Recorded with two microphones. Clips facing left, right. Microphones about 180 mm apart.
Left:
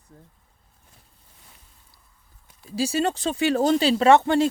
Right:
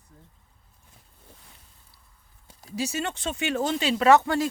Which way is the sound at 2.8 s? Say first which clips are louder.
Left 6 dB; 30° left (ahead or behind).